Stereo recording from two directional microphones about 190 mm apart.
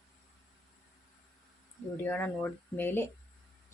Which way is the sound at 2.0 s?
10° left (ahead or behind).